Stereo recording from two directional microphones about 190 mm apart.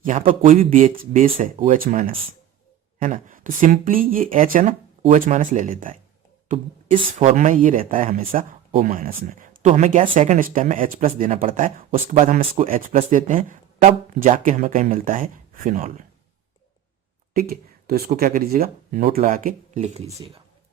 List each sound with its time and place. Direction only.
0.0 s speech: 45° right (ahead or behind)
7.3 s speech: 40° right (ahead or behind)
17.3 s speech: 50° right (ahead or behind); by 20.1 s 35° right (ahead or behind)